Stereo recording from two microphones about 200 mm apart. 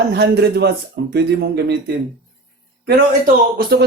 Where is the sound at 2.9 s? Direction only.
50° right (ahead or behind).